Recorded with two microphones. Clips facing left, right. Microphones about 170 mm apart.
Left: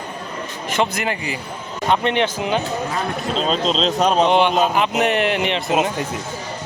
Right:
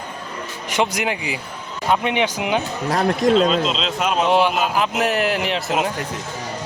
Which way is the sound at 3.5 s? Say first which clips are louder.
Left 2 dB; 40° left (ahead or behind).